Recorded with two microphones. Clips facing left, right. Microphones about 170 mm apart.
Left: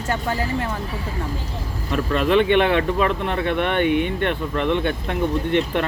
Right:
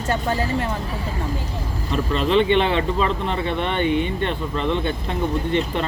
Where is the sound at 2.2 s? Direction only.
55° left (ahead or behind).